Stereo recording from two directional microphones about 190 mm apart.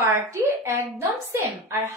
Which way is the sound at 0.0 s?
10° right (ahead or behind).